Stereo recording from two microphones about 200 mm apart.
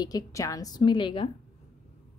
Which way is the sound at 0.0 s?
15° left (ahead or behind).